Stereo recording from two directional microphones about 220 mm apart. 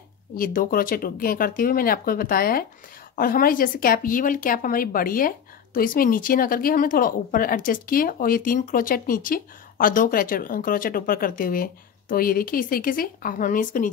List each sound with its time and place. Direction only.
0.4 s speech: 40° left (ahead or behind)